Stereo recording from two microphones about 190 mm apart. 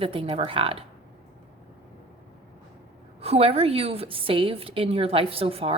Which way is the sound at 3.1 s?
30° right (ahead or behind).